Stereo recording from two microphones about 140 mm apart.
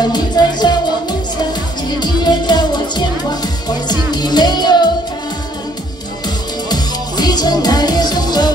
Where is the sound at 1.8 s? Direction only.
30° left (ahead or behind).